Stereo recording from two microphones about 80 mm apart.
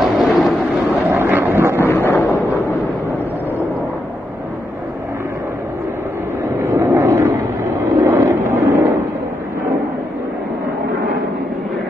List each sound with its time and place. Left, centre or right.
0.0 s vehicle: centre
1.1 s vehicle: right
1.8 s a sound: left
6.6 s vehicle: right